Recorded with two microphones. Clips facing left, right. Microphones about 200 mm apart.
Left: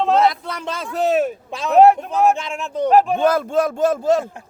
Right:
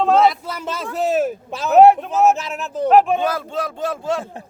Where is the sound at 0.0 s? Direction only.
Centre (ahead or behind).